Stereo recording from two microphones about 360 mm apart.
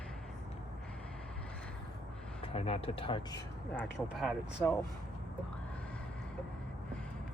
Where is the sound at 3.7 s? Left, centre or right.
Centre.